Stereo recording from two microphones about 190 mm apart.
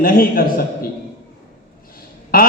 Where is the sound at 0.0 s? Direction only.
50° left (ahead or behind).